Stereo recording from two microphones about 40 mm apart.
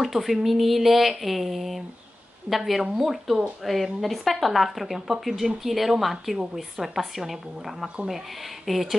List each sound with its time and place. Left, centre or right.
0.0 s speech: centre